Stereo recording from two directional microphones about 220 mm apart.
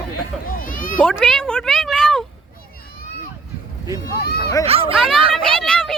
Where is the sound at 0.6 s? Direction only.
40° left (ahead or behind).